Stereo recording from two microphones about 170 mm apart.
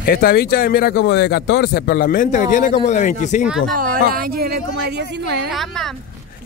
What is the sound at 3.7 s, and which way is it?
Speech, 55° right (ahead or behind).